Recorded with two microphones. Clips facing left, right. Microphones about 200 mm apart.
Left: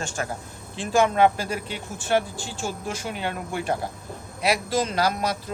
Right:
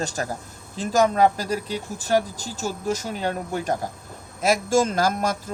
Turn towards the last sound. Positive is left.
turn(degrees=-45)  # may be behind; listen again after turning